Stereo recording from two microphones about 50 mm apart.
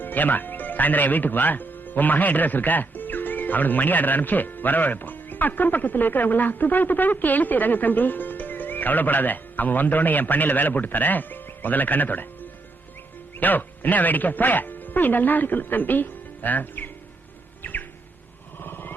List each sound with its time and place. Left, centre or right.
0.0 s speech: left
13.4 s speech: left
17.6 s music: left
18.6 s vehicle: left